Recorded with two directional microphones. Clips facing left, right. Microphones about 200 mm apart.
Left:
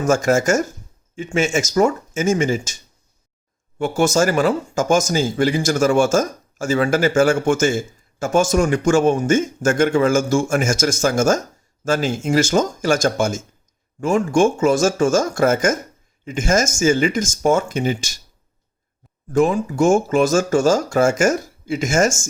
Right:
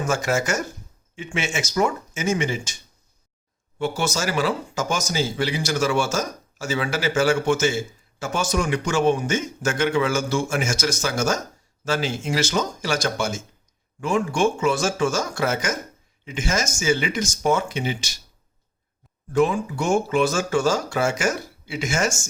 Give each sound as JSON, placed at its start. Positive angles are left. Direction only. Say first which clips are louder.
{"t": 0.0, "sound": "speech", "louder": "left 7 dB", "side_deg": 45}
{"t": 3.8, "sound": "speech", "louder": "left 8 dB", "side_deg": 50}
{"t": 19.3, "sound": "speech", "louder": "left 3 dB", "side_deg": 45}